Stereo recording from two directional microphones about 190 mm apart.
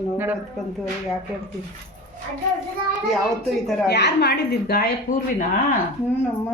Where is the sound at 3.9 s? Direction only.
60° left (ahead or behind).